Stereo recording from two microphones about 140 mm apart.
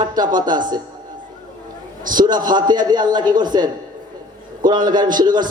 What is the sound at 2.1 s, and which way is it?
A man's voice, 30° right (ahead or behind).